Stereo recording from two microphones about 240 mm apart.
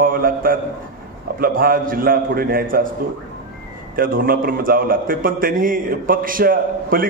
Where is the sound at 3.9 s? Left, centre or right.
Right.